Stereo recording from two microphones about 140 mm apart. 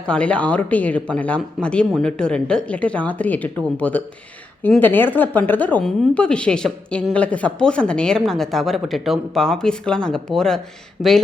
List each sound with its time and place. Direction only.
0.0 s speech: 10° left (ahead or behind)